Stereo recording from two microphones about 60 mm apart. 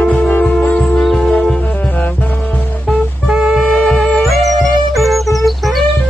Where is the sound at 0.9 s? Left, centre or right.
Centre.